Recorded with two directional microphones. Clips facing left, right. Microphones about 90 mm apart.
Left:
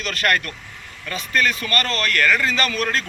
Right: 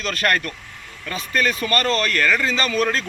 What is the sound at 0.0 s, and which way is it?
A man's voice, 35° right (ahead or behind).